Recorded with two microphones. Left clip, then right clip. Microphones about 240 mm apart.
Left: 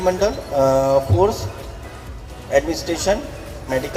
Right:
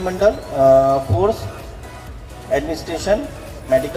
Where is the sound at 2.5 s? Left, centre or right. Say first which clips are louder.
Left 2 dB; left.